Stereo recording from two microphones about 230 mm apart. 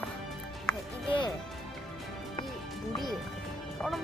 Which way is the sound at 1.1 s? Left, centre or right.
Left.